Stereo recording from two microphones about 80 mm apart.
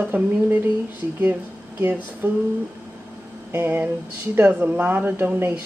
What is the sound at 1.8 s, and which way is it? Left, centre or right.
Speech, right.